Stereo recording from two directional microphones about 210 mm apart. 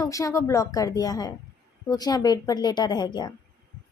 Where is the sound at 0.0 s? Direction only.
15° left (ahead or behind).